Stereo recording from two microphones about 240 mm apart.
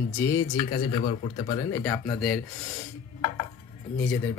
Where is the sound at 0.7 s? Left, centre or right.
Left; by 2.4 s centre.